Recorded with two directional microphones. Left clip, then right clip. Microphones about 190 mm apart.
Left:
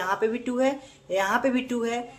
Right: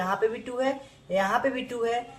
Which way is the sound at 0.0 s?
35° left (ahead or behind).